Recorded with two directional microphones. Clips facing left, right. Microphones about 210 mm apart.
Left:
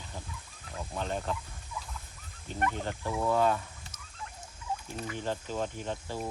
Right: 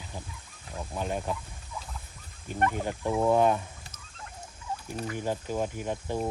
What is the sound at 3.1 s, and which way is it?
Speech, 25° right (ahead or behind).